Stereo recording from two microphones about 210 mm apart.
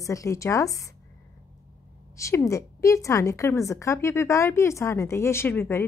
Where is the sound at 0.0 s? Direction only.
15° left (ahead or behind).